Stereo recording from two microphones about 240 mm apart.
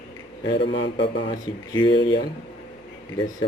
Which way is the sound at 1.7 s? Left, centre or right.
Centre.